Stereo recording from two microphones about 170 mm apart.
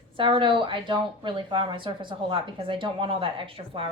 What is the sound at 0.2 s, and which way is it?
A woman's voice, 30° right (ahead or behind).